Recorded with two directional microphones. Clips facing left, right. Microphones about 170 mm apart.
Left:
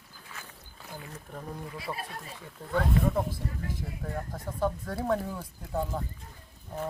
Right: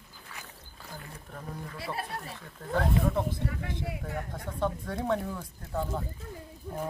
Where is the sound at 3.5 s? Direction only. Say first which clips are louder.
Right 2 dB; 80° right.